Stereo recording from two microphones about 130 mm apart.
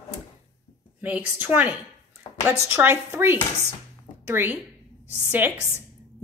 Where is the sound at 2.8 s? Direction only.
15° right (ahead or behind).